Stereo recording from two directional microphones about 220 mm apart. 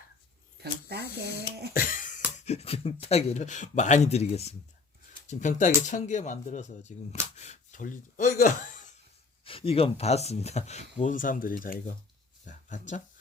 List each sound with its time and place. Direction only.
0.6 s speech: 45° right (ahead or behind)
1.7 s throat clearing: 40° left (ahead or behind)
2.4 s speech: 30° left (ahead or behind)
9.4 s speech: 25° left (ahead or behind)
12.5 s a sound: 35° left (ahead or behind)